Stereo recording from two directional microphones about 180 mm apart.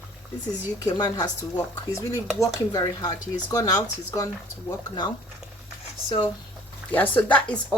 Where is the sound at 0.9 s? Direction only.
20° left (ahead or behind).